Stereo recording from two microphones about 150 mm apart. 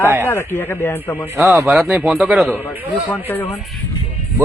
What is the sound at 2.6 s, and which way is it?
Speech, 15° left (ahead or behind).